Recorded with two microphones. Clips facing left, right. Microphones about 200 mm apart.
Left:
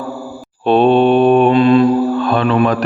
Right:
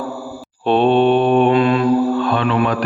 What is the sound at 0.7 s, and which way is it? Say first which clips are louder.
Mantra: left 3 dB; 45° left (ahead or behind).